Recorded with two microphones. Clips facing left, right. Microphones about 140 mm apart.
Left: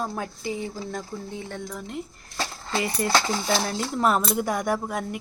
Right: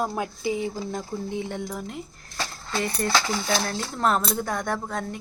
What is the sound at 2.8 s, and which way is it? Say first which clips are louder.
Speech: left 1 dB; 5° left (ahead or behind).